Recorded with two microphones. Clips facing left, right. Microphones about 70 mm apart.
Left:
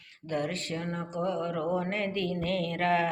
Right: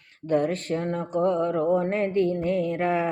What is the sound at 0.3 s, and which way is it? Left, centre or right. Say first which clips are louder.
Mantra: right 8 dB; right.